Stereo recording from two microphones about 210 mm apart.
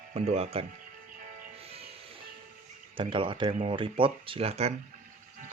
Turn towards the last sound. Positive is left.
turn(degrees=-30)  # may be behind; listen again after turning